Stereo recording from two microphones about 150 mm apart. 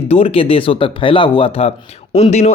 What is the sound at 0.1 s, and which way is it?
A man's voice, 40° left (ahead or behind).